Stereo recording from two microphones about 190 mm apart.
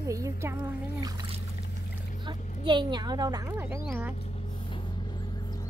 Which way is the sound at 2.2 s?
25° right (ahead or behind).